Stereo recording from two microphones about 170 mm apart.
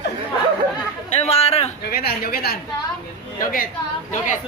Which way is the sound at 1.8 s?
65° left (ahead or behind).